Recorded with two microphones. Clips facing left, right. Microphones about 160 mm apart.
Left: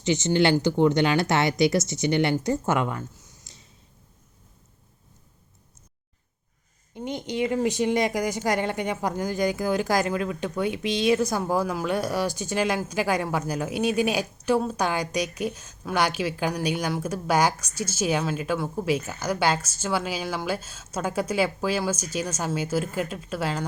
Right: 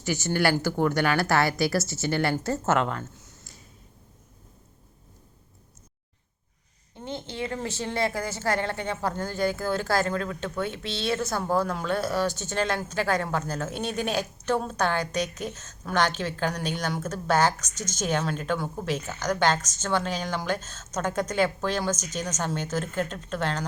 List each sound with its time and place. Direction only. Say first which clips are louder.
0.0 s speech: left 4 dB; 20° left (ahead or behind)
6.9 s speech: left 5 dB; 15° left (ahead or behind)